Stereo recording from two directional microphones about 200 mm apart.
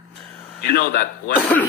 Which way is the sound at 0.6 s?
50° left (ahead or behind).